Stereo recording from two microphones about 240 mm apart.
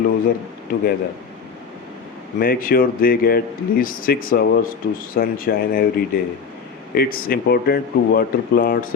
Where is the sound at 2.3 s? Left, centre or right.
Left.